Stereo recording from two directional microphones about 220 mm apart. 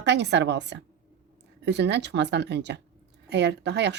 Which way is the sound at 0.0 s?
50° right (ahead or behind).